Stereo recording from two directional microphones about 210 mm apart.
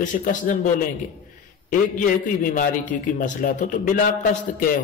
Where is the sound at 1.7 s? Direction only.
40° left (ahead or behind).